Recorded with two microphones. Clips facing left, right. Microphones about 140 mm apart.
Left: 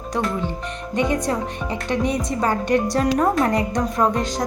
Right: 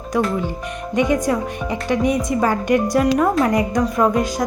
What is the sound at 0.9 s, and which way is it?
Speech, 15° right (ahead or behind).